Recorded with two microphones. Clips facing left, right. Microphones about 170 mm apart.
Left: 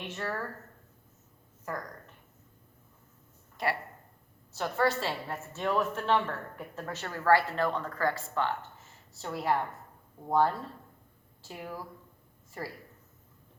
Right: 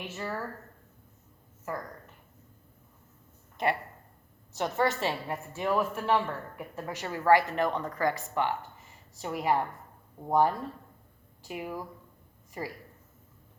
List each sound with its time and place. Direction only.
0.0 s a woman's voice: 5° right (ahead or behind)
1.7 s a woman's voice: 5° right (ahead or behind)
3.6 s a woman's voice: 20° right (ahead or behind)